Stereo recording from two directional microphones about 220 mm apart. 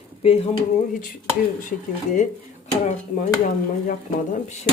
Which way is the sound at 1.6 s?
35° left (ahead or behind).